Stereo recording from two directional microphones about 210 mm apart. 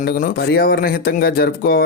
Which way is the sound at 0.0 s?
40° left (ahead or behind).